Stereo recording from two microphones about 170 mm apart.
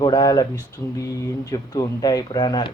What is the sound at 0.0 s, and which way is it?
Speech, 25° left (ahead or behind).